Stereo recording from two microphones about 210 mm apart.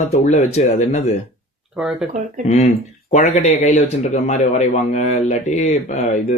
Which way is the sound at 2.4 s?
30° left (ahead or behind).